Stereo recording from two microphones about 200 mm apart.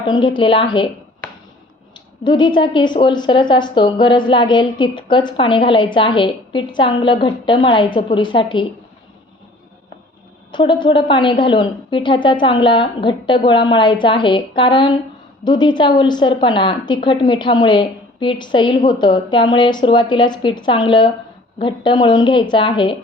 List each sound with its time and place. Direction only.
0.0 s a woman's voice: 25° left (ahead or behind)
2.2 s a woman's voice: 25° left (ahead or behind)
10.5 s a woman's voice: 25° left (ahead or behind)